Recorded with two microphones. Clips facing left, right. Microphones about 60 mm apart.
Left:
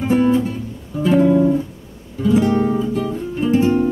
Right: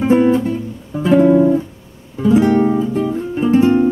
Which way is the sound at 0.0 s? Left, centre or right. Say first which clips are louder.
Right 3 dB; right.